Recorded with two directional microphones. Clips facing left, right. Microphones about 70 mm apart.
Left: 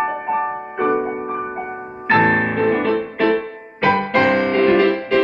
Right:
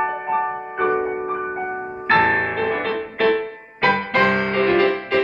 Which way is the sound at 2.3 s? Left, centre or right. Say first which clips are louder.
Left 3 dB; centre.